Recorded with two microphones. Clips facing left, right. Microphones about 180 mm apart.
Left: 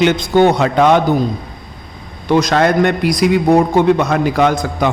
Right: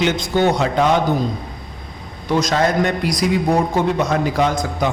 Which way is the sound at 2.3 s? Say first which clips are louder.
Left 5 dB; 65° left (ahead or behind).